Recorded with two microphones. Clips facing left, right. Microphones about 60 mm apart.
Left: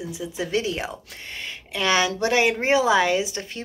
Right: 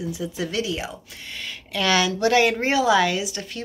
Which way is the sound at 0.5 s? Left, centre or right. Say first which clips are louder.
Left 5 dB; left.